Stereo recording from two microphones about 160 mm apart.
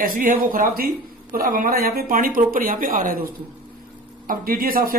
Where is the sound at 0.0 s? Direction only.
60° right (ahead or behind).